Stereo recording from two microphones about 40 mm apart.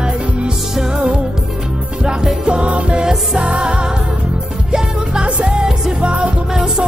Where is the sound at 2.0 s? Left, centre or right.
Right.